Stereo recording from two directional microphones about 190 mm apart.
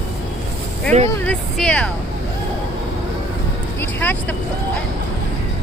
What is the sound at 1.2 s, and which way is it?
Speech, 5° left (ahead or behind).